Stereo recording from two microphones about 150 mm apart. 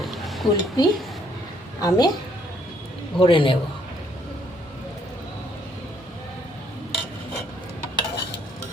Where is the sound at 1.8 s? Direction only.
25° left (ahead or behind).